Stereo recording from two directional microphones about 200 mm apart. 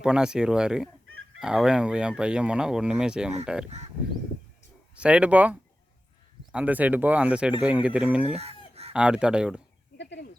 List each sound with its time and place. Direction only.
0.0 s speech: 5° right (ahead or behind)
4.9 s speech: 5° right (ahead or behind)
8.4 s fowl: 30° right (ahead or behind)
8.9 s speech: 5° right (ahead or behind)
10.0 s bird: 60° left (ahead or behind)